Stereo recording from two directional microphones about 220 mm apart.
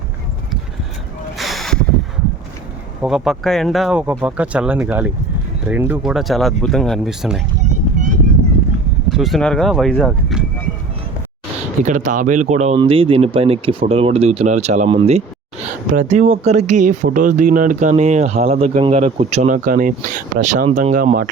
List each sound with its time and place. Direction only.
1.4 s a sound: centre (ahead or behind)
3.0 s speech: 5° right (ahead or behind)
9.0 s speech: centre (ahead or behind)
11.8 s speech: 35° right (ahead or behind)